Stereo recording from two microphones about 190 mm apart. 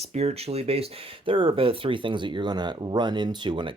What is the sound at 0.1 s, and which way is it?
Speech, 35° right (ahead or behind).